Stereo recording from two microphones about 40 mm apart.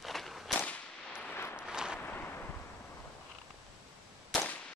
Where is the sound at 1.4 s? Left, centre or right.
Left.